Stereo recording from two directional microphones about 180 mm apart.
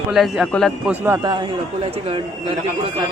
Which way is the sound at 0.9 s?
10° right (ahead or behind).